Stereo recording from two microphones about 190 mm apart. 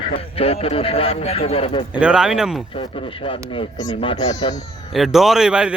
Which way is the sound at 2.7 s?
25° left (ahead or behind).